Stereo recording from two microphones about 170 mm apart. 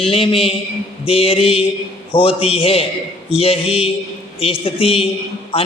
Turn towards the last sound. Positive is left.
turn(degrees=35)  # may be behind; listen again after turning